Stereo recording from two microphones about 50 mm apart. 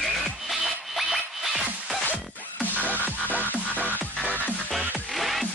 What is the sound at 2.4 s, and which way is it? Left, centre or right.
Music, left.